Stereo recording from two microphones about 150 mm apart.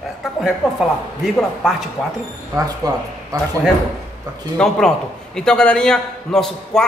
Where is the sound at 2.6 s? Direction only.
25° right (ahead or behind).